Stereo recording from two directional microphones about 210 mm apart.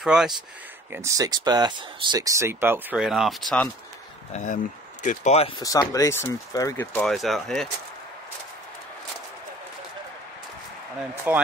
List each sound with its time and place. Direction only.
0.0 s speech: 5° right (ahead or behind)
0.9 s speech: 15° right (ahead or behind); by 3.6 s centre (ahead or behind)
5.0 s speech: 35° left (ahead or behind)
5.6 s speech: 15° left (ahead or behind)
7.0 s speech: centre (ahead or behind)
11.3 s speech: 10° right (ahead or behind)